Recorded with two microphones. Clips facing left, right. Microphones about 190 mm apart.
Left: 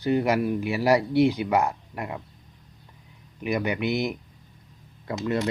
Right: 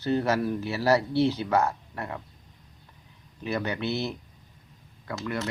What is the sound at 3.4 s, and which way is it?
Speech, 15° left (ahead or behind).